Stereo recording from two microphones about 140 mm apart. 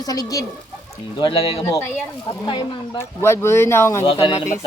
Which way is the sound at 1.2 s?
40° left (ahead or behind).